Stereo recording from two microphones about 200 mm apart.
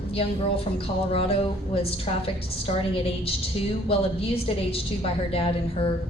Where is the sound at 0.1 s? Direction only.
30° left (ahead or behind).